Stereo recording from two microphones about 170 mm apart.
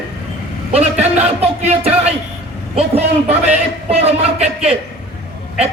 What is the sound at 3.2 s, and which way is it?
A man's voice, 40° right (ahead or behind).